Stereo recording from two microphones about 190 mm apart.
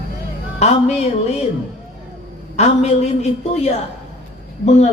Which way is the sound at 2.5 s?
35° left (ahead or behind).